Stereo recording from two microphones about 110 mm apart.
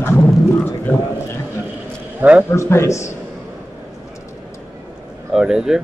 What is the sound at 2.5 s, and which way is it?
Speech, 25° left (ahead or behind).